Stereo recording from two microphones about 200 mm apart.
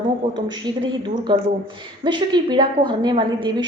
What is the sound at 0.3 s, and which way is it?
A woman's voice, 25° right (ahead or behind).